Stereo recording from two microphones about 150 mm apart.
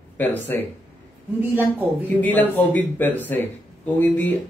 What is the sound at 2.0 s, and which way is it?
Speech, 10° left (ahead or behind).